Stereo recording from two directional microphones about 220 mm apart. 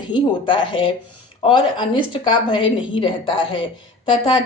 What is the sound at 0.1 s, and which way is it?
A woman's voice, 20° left (ahead or behind).